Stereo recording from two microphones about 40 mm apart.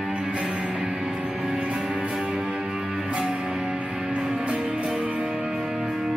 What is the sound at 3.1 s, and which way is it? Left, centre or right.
Music, right.